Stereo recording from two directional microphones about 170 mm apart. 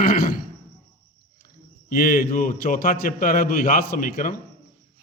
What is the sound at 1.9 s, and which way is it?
A man's voice, 50° left (ahead or behind).